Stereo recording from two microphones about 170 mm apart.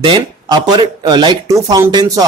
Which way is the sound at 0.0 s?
25° right (ahead or behind).